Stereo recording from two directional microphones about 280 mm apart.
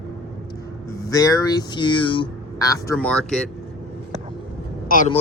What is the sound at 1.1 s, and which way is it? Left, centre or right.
Speech, centre.